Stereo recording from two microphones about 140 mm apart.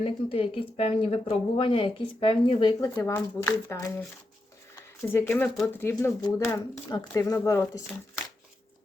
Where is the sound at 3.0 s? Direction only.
20° left (ahead or behind).